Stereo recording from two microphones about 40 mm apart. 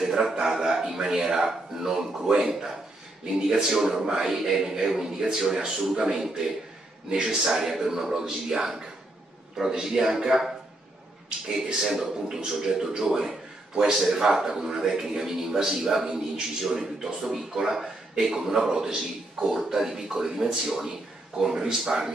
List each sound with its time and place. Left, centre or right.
0.0 s a sound: centre
0.4 s a man's voice: centre
11.9 s a man's voice: centre